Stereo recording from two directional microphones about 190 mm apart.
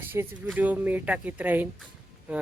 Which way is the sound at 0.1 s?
10° right (ahead or behind).